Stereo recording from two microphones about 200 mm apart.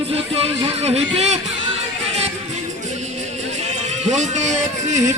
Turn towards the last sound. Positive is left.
turn(degrees=-35)  # may be behind; listen again after turning